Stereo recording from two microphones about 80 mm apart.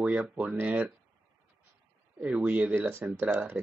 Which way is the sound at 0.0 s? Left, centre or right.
Centre.